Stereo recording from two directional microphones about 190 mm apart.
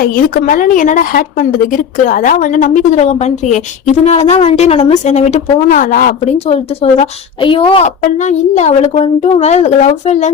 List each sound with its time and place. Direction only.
0.0 s a woman's voice: 45° left (ahead or behind)